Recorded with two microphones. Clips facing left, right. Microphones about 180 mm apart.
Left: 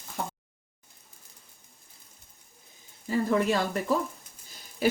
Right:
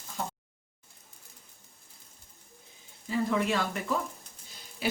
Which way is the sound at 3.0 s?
45° left (ahead or behind).